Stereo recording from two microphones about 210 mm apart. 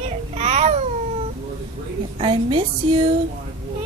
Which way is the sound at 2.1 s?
25° right (ahead or behind).